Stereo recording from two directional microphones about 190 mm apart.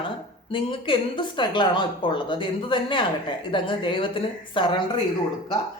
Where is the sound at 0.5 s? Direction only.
25° left (ahead or behind).